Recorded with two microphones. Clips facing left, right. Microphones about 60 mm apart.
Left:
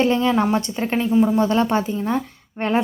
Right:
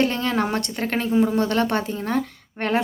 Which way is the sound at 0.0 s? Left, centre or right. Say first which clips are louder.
Left 4 dB; centre.